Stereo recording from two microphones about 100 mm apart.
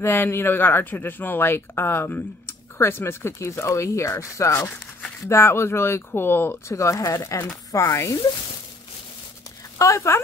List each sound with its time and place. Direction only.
0.0 s speech: 20° left (ahead or behind)
9.8 s speech: 30° left (ahead or behind)